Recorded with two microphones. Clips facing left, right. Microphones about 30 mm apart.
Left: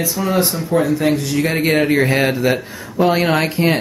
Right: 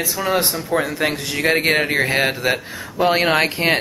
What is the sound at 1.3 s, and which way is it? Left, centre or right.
Speech, right.